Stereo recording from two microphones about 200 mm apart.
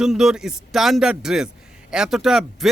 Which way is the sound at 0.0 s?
Centre (ahead or behind).